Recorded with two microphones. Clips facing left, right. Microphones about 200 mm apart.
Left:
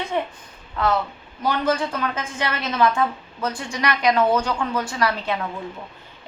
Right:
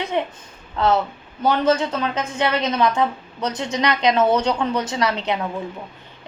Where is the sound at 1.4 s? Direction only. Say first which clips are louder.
Right 4 dB; 25° right (ahead or behind).